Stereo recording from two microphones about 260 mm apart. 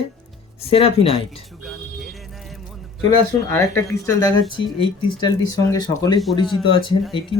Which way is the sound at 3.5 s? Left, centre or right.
Centre.